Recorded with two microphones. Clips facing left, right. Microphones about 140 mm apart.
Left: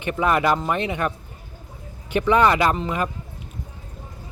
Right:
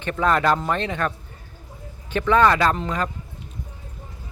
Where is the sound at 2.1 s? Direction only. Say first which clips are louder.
Even; 15° left (ahead or behind).